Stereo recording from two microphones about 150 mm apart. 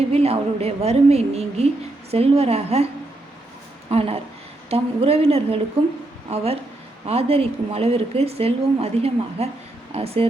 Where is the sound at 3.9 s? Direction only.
40° right (ahead or behind).